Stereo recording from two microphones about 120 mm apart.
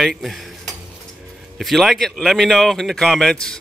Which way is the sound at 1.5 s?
Centre (ahead or behind).